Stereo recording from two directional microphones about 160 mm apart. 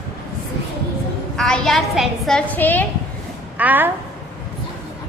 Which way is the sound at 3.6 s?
10° right (ahead or behind).